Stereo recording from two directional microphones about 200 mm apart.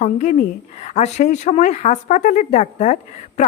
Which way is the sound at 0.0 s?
35° left (ahead or behind).